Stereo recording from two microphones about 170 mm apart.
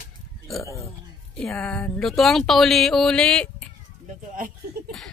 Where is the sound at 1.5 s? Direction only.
10° left (ahead or behind).